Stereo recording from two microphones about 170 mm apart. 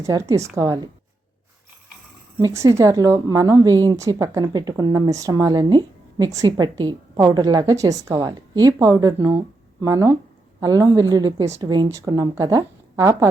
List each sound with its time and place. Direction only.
0.0 s a woman's voice: 20° right (ahead or behind)
2.4 s a woman's voice: 20° right (ahead or behind)